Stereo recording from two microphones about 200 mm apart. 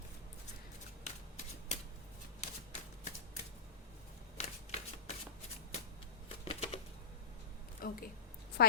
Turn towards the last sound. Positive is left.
turn(degrees=45)  # may be behind; listen again after turning